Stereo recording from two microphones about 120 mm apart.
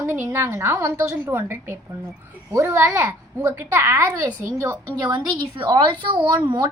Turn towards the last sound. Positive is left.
turn(degrees=-40)  # may be behind; listen again after turning